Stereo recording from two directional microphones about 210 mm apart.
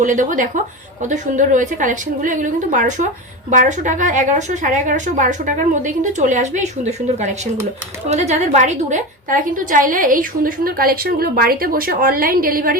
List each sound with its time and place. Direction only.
0.0 s a woman's voice: 40° right (ahead or behind)